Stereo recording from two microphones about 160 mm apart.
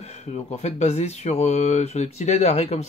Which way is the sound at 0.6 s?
45° left (ahead or behind).